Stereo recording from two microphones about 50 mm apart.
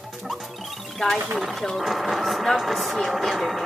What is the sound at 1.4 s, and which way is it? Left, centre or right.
Speech, centre.